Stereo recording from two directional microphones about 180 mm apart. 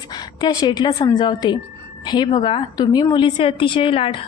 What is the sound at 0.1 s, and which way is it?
A woman's voice, 25° left (ahead or behind).